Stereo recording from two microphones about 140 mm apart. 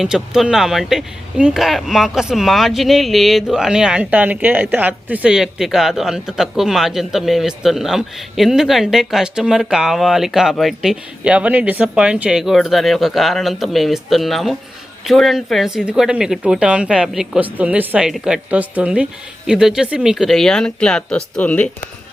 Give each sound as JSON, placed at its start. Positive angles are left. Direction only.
{"t": 0.0, "sound": "speech", "side_deg": -5}